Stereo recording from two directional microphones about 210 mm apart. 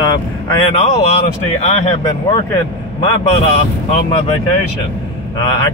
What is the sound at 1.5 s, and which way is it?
Speech, 30° left (ahead or behind).